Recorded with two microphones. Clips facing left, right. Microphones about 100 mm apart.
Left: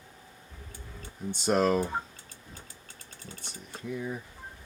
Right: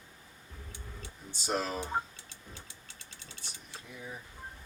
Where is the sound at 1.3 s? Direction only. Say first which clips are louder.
Left 9 dB; 55° left (ahead or behind).